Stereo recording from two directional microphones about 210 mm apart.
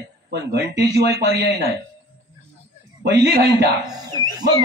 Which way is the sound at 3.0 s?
50° right (ahead or behind).